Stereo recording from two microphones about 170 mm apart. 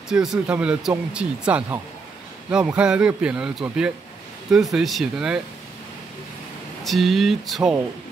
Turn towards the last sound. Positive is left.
turn(degrees=0)  # may be behind; listen again after turning